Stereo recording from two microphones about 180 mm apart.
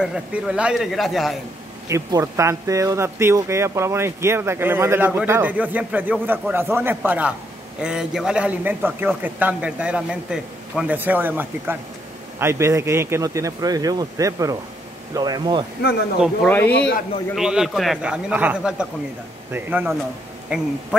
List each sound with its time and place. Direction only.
0.0 s a man's voice: 5° right (ahead or behind)
1.9 s speech: 20° right (ahead or behind)
16.4 s speech: 10° left (ahead or behind)
17.4 s a man's voice: 5° right (ahead or behind)